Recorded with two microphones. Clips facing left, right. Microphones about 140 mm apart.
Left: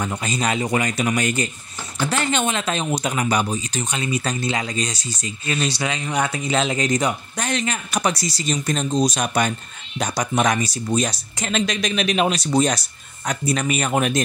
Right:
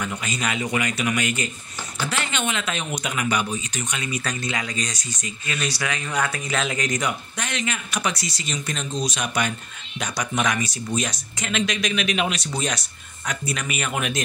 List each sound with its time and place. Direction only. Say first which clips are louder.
0.0 s speech: left 4 dB; 35° left (ahead or behind)